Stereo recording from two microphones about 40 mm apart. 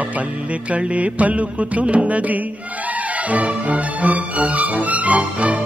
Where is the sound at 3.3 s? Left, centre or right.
Right.